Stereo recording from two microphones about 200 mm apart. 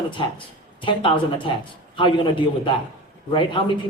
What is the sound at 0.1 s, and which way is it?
Speech, 25° left (ahead or behind).